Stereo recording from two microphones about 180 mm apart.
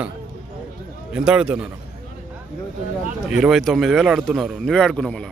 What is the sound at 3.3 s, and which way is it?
A man's voice, centre (ahead or behind).